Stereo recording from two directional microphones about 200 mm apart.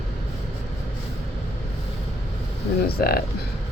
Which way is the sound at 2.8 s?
50° left (ahead or behind).